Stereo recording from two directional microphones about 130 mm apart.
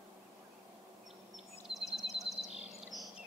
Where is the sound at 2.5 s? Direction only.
55° right (ahead or behind).